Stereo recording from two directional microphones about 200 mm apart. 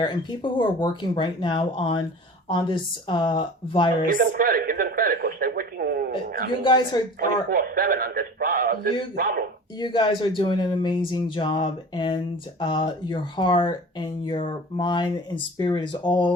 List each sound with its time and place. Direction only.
0.0 s speech: 25° left (ahead or behind)
4.0 s radio: 45° right (ahead or behind)
6.7 s speech: 20° left (ahead or behind)
7.2 s speech: 45° right (ahead or behind)
9.8 s speech: 25° left (ahead or behind)